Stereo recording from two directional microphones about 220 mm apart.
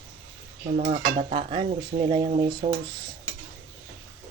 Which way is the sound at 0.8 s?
35° right (ahead or behind).